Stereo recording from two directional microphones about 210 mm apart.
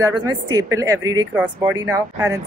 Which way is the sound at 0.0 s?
15° right (ahead or behind).